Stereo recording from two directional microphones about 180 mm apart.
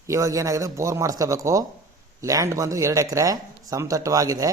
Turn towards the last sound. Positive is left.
turn(degrees=-20)  # may be behind; listen again after turning